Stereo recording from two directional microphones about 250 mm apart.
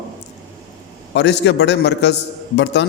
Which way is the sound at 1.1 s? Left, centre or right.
Left.